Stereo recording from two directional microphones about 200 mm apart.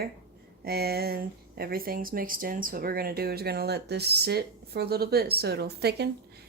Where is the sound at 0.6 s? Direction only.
50° right (ahead or behind).